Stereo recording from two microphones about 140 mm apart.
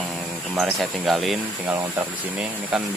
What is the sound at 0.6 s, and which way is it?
Speech, centre (ahead or behind).